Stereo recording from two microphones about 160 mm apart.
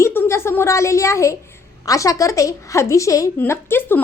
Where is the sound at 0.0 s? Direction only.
15° left (ahead or behind).